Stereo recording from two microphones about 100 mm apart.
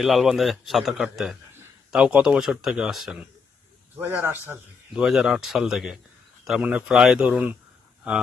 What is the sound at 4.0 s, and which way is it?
Speech, 20° right (ahead or behind).